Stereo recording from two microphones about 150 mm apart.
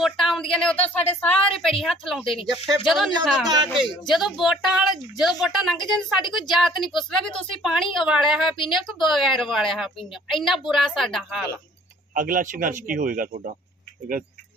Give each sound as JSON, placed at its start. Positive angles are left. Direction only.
{"t": 0.0, "sound": "a man's voice", "side_deg": 0}
{"t": 6.2, "sound": "a woman's voice", "side_deg": 30}
{"t": 6.5, "sound": "a man's voice", "side_deg": 0}
{"t": 8.5, "sound": "a woman's voice", "side_deg": 35}
{"t": 8.9, "sound": "a man's voice", "side_deg": 0}
{"t": 12.1, "sound": "speech", "side_deg": -65}